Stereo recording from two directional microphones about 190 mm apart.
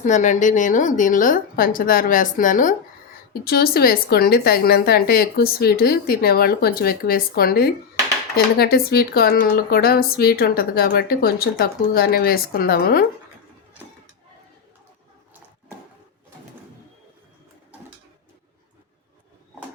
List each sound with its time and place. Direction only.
0.0 s speech: 40° left (ahead or behind)